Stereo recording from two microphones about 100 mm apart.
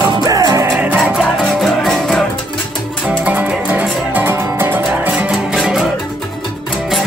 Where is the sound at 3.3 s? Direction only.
15° right (ahead or behind).